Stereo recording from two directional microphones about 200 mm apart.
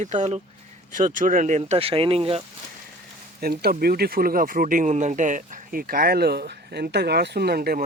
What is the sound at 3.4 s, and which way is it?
Speech, 50° right (ahead or behind).